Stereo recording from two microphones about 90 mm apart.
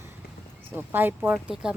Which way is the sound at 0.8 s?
20° right (ahead or behind).